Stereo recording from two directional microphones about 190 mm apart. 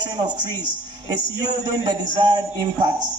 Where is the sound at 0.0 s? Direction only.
20° right (ahead or behind).